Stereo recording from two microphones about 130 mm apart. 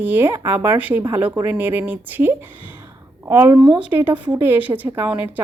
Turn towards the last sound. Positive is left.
turn(degrees=-15)  # may be behind; listen again after turning